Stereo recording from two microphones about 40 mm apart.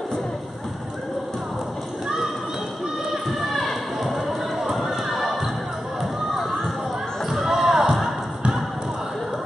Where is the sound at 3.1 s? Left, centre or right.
Centre.